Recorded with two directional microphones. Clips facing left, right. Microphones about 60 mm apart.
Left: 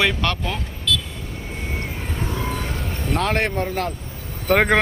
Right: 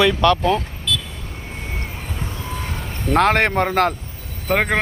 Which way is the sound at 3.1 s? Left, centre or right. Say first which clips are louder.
Right 6 dB; right.